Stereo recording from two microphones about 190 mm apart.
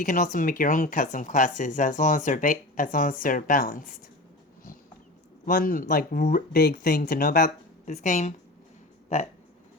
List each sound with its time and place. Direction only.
0.0 s speech: 45° left (ahead or behind)
5.5 s speech: 45° left (ahead or behind)
7.1 s a woman's voice: 50° left (ahead or behind)